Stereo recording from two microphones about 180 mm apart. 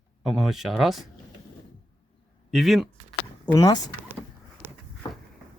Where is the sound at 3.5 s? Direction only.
20° left (ahead or behind).